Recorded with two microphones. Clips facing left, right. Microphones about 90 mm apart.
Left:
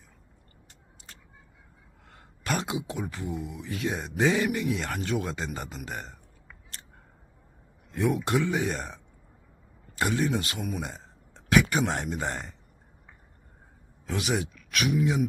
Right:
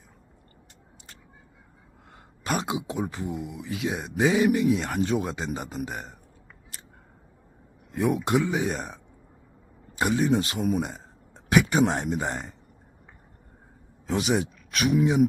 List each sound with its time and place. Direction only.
2.1 s speech: 15° right (ahead or behind)
3.7 s speech: 5° right (ahead or behind)
7.9 s speech: 15° right (ahead or behind)
10.8 s a sound: 15° right (ahead or behind)
11.8 s speech: 25° right (ahead or behind)
14.1 s speech: 25° right (ahead or behind)